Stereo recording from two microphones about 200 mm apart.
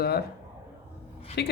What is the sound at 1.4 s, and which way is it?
Speech, 55° left (ahead or behind).